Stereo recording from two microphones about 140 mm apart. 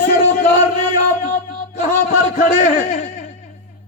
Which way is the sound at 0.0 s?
65° left (ahead or behind).